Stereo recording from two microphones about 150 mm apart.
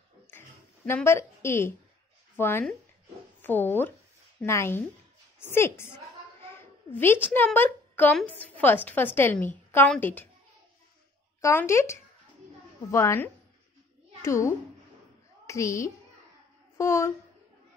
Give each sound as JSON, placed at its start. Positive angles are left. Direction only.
{"t": 0.3, "sound": "a sound", "side_deg": 15}
{"t": 2.3, "sound": "a woman's voice", "side_deg": 15}
{"t": 11.4, "sound": "a woman's voice", "side_deg": 20}